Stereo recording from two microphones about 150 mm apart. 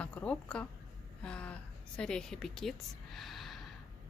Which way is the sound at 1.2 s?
5° left (ahead or behind).